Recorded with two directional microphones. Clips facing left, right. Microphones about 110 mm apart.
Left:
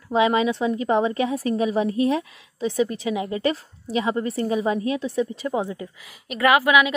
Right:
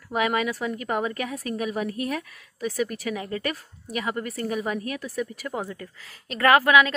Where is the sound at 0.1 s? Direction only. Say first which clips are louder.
Left 5 dB; 20° left (ahead or behind).